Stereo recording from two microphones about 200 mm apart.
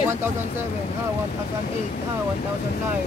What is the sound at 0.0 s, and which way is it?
Vehicle, 10° right (ahead or behind).